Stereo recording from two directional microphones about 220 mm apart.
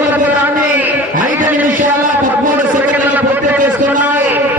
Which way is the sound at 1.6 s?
35° right (ahead or behind).